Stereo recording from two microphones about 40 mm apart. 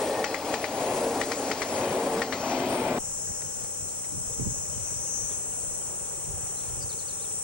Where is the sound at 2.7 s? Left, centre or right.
Right.